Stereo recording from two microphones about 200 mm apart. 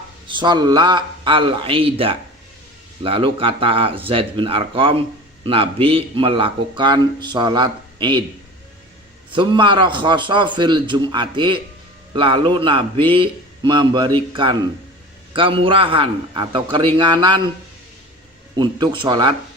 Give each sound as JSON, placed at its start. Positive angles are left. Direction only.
{"t": 0.3, "sound": "speech", "side_deg": -20}
{"t": 9.3, "sound": "speech", "side_deg": -25}
{"t": 18.5, "sound": "speech", "side_deg": -20}